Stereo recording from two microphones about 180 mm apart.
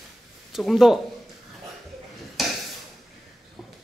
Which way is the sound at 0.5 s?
Centre (ahead or behind).